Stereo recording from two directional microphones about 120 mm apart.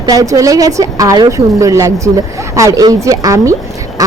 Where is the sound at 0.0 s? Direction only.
30° right (ahead or behind).